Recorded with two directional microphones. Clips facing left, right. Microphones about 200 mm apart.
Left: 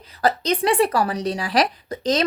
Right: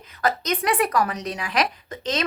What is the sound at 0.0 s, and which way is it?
A woman's voice, 35° left (ahead or behind).